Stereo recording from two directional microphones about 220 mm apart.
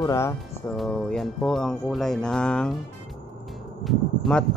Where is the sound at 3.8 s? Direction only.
Centre (ahead or behind).